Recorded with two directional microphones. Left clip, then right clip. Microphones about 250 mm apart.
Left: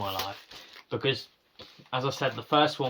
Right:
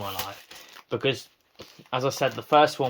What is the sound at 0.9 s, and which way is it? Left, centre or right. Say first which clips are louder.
Speech: right 3 dB; centre.